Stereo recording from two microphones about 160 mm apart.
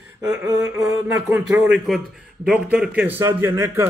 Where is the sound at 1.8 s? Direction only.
5° right (ahead or behind).